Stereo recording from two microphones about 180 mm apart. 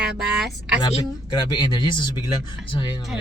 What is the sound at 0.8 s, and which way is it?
Speech, 25° left (ahead or behind).